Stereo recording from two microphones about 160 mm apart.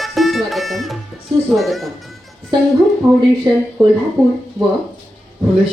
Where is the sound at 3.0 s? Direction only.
15° right (ahead or behind).